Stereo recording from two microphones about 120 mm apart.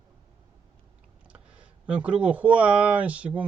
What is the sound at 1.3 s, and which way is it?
Speech, 10° right (ahead or behind).